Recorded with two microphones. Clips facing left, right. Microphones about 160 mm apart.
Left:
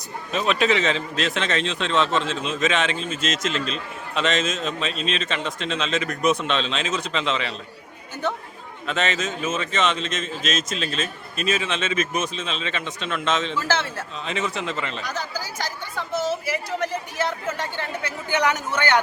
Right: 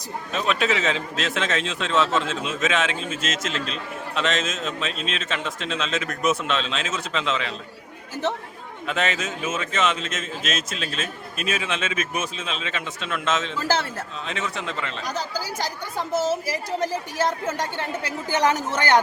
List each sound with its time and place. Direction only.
0.3 s speech: centre (ahead or behind)
8.9 s speech: 10° right (ahead or behind)
16.0 s a woman's voice: 40° right (ahead or behind)
18.3 s a woman's voice: 35° right (ahead or behind)